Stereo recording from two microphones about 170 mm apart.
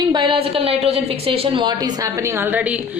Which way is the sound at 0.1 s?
30° right (ahead or behind).